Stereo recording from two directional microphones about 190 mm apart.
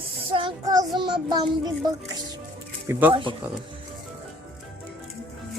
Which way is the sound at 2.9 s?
10° right (ahead or behind).